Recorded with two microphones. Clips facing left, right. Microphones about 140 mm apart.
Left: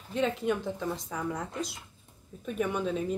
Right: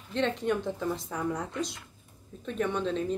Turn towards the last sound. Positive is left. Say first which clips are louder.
# right 1 dB
turn(degrees=10)  # may be behind; listen again after turning